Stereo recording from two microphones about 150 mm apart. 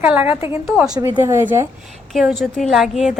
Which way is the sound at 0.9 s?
15° right (ahead or behind).